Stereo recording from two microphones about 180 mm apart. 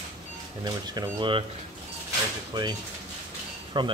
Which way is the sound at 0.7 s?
25° right (ahead or behind).